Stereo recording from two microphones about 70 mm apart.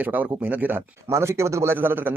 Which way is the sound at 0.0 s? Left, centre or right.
Right.